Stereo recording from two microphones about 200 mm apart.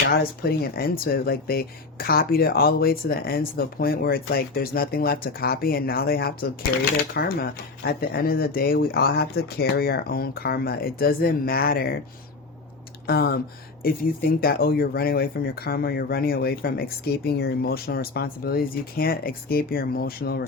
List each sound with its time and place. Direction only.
0.1 s speech: 50° left (ahead or behind)
13.1 s speech: 50° left (ahead or behind)